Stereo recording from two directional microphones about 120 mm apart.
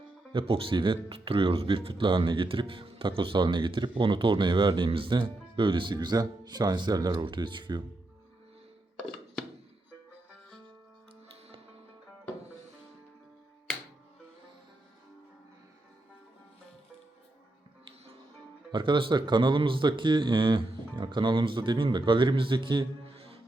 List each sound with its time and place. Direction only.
0.3 s speech: 50° right (ahead or behind)
18.7 s speech: 40° right (ahead or behind)